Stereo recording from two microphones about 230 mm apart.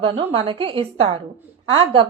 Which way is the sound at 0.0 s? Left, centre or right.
Right.